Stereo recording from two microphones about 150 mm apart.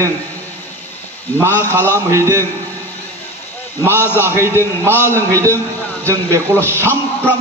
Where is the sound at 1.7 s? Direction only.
15° right (ahead or behind).